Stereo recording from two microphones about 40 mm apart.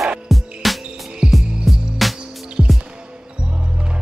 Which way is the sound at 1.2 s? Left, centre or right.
Centre.